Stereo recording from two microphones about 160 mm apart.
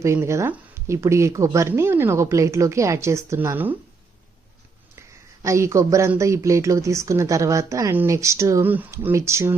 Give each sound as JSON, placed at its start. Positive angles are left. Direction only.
{"t": 0.0, "sound": "speech", "side_deg": -15}
{"t": 4.9, "sound": "speech", "side_deg": -20}